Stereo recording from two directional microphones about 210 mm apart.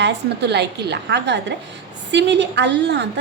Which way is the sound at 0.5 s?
55° right (ahead or behind).